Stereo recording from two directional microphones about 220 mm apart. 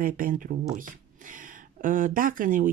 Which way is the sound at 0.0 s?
40° right (ahead or behind).